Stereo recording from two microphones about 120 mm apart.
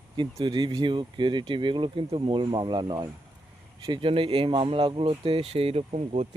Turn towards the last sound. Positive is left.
turn(degrees=-60)  # may be behind; listen again after turning